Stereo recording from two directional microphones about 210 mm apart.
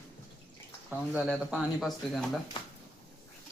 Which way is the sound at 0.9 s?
5° right (ahead or behind).